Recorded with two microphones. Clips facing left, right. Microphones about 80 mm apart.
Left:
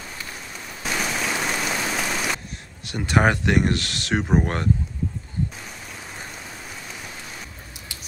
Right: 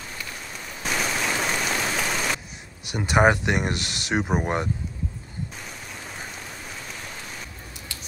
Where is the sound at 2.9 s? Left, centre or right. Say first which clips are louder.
Right 1 dB; centre.